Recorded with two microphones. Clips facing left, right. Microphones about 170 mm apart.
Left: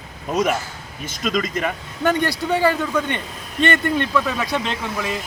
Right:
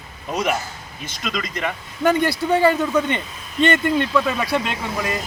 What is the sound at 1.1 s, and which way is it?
Speech, 45° left (ahead or behind).